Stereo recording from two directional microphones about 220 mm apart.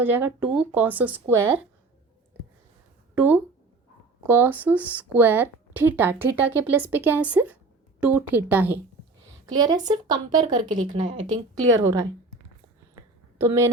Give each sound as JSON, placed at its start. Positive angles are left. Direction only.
{"t": 0.0, "sound": "speech", "side_deg": -10}
{"t": 3.2, "sound": "speech", "side_deg": -10}
{"t": 9.5, "sound": "speech", "side_deg": -20}
{"t": 13.0, "sound": "a sound", "side_deg": -15}